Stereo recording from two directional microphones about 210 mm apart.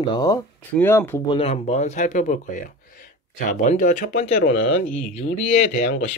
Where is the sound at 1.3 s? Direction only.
30° left (ahead or behind).